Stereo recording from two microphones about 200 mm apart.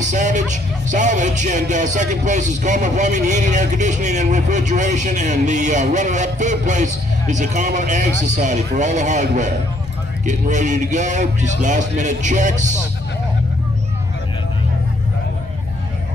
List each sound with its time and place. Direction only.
0.0 s speech: 40° right (ahead or behind)